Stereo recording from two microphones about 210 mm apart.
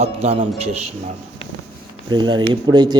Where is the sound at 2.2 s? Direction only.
20° right (ahead or behind).